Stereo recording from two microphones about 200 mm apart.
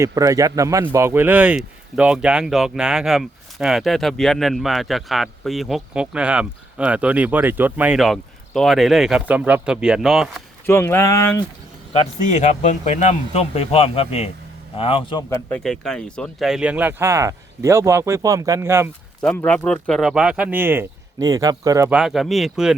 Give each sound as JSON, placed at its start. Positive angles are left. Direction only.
{"t": 0.0, "sound": "speech", "side_deg": -15}
{"t": 10.7, "sound": "speech", "side_deg": 10}
{"t": 12.3, "sound": "a man's voice", "side_deg": 35}
{"t": 15.3, "sound": "speech", "side_deg": 10}
{"t": 19.5, "sound": "speech", "side_deg": 5}
{"t": 21.9, "sound": "speech", "side_deg": 0}